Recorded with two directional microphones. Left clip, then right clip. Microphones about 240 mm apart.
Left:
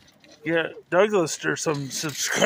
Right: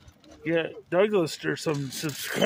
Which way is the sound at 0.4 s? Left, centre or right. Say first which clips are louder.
Left 2 dB; centre.